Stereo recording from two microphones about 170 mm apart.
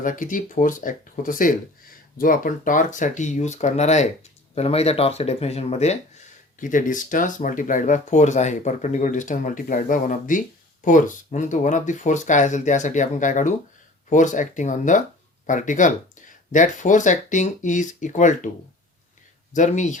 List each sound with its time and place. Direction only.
0.0 s speech: 50° left (ahead or behind)
19.5 s speech: 45° left (ahead or behind)